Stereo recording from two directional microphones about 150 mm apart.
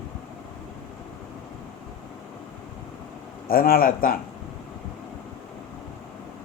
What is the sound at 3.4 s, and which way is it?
Speech, 75° left (ahead or behind).